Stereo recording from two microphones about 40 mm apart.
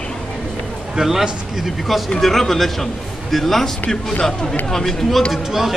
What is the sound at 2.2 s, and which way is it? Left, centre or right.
Speech, centre.